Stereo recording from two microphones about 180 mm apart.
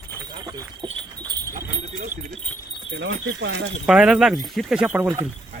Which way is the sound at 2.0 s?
50° right (ahead or behind).